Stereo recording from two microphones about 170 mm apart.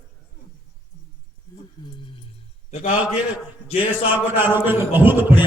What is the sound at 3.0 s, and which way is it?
A man's voice, 10° right (ahead or behind).